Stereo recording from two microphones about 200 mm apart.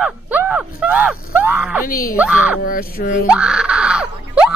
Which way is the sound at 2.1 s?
5° right (ahead or behind).